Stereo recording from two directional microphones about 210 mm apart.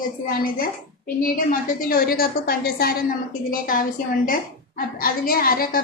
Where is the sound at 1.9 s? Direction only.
45° left (ahead or behind).